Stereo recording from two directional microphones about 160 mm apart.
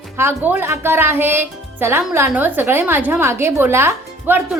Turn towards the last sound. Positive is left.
turn(degrees=-15)  # may be behind; listen again after turning